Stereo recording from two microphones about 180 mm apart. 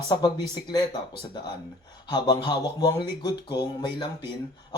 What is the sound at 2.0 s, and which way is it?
Speech, 20° left (ahead or behind).